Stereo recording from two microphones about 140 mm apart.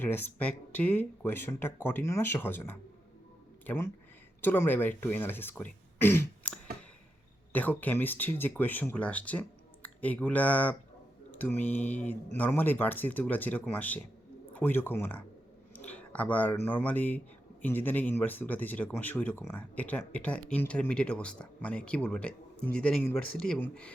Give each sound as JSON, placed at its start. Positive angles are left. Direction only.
{"t": 0.0, "sound": "speech", "side_deg": 15}
{"t": 6.0, "sound": "throat clearing", "side_deg": 15}
{"t": 7.5, "sound": "speech", "side_deg": 10}
{"t": 15.7, "sound": "a sound", "side_deg": 10}
{"t": 16.6, "sound": "speech", "side_deg": 10}